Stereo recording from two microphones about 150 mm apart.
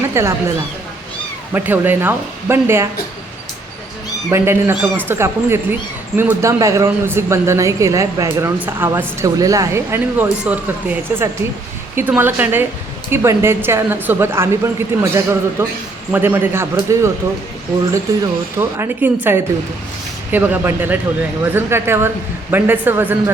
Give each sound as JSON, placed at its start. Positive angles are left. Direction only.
{"t": 0.1, "sound": "a woman's voice", "side_deg": -20}
{"t": 1.5, "sound": "a woman's voice", "side_deg": -15}
{"t": 4.3, "sound": "a woman's voice", "side_deg": -15}
{"t": 17.9, "sound": "a woman's voice", "side_deg": -20}